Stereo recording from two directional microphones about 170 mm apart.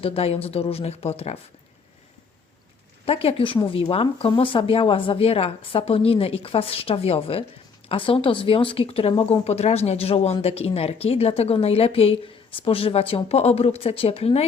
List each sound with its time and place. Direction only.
0.0 s speech: 35° left (ahead or behind)
3.1 s speech: 35° left (ahead or behind)